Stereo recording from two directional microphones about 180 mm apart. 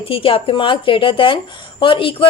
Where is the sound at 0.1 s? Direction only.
30° left (ahead or behind).